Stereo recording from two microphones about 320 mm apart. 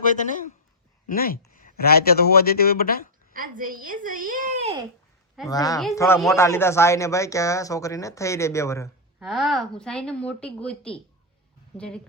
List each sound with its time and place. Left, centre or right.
0.0 s speech: left
3.3 s a child's voice: right
5.5 s speech: centre